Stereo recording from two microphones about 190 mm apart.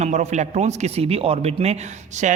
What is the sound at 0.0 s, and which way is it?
A man's voice, 35° right (ahead or behind).